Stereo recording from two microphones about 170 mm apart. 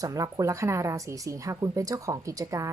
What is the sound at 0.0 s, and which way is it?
A woman's voice, 20° right (ahead or behind).